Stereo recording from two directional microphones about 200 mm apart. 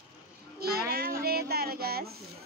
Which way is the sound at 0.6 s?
50° right (ahead or behind).